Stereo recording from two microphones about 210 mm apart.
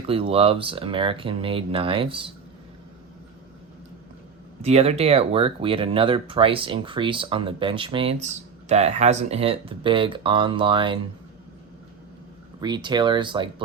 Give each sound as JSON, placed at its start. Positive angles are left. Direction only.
{"t": 0.1, "sound": "speech", "side_deg": -25}
{"t": 4.6, "sound": "speech", "side_deg": -30}
{"t": 12.5, "sound": "speech", "side_deg": -20}